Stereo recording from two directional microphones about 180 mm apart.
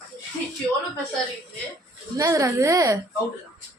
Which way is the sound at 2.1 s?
20° right (ahead or behind).